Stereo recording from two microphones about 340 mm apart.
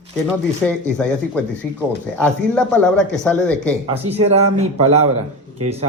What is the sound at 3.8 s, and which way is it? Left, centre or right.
Speech, centre.